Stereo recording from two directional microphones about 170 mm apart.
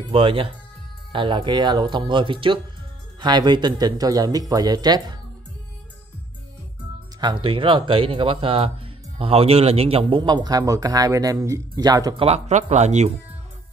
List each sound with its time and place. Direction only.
0.1 s a man's voice: 30° right (ahead or behind)
7.2 s a man's voice: 25° right (ahead or behind); by 13.1 s 40° right (ahead or behind)